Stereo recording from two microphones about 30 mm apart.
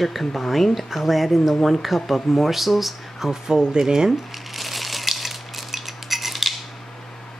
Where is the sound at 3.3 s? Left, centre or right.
Right.